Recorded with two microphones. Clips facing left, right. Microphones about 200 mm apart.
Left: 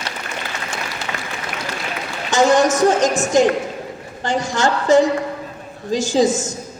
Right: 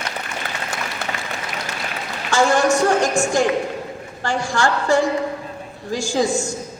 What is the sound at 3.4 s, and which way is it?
A man's voice, 20° left (ahead or behind).